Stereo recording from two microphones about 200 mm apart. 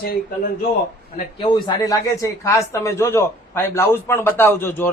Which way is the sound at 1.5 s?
20° left (ahead or behind).